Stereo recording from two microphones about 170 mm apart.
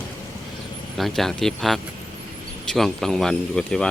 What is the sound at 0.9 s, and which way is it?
Speech, centre (ahead or behind).